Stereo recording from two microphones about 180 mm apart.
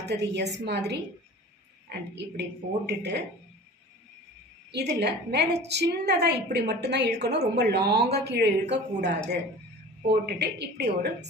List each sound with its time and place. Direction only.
0.0 s a woman's voice: 70° right (ahead or behind)
4.7 s a woman's voice: 70° right (ahead or behind)